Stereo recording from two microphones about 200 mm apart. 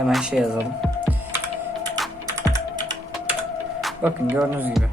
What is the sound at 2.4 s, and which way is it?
Typing, 15° right (ahead or behind).